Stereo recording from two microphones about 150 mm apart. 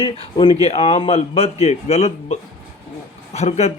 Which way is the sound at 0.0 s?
35° left (ahead or behind).